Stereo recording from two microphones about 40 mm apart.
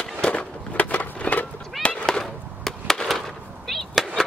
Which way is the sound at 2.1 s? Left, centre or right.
Centre.